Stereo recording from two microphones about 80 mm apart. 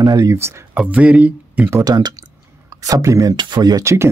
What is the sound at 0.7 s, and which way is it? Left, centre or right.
Speech, centre.